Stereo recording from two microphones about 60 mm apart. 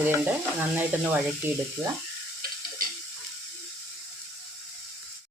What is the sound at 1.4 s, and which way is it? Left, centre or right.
Speech, right.